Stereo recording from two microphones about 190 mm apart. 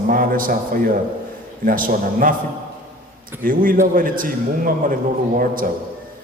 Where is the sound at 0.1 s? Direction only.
45° right (ahead or behind).